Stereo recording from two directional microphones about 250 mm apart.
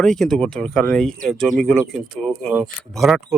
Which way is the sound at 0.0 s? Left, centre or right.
Centre.